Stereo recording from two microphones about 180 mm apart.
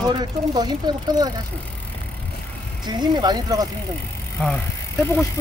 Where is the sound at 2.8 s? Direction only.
25° right (ahead or behind).